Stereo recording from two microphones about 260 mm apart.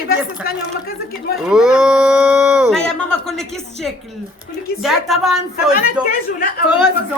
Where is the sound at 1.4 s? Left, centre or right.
Centre.